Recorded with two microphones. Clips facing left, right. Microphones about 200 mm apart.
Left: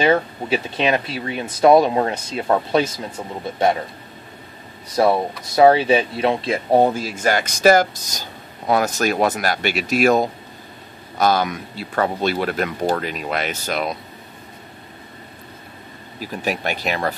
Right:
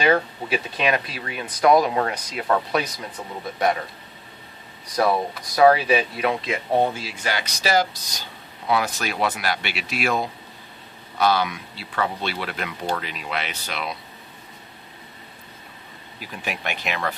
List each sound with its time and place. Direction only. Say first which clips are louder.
0.0 s speech: left 3 dB; 25° left (ahead or behind)
4.9 s speech: left 4 dB; 25° left (ahead or behind); by 13.9 s 45° left (ahead or behind)
16.2 s speech: left 7 dB; 40° left (ahead or behind)